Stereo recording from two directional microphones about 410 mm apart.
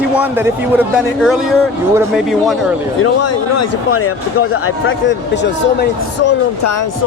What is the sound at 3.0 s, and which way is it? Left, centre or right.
Speech, left.